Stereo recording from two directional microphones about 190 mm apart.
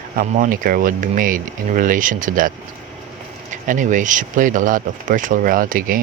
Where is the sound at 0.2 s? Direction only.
45° right (ahead or behind).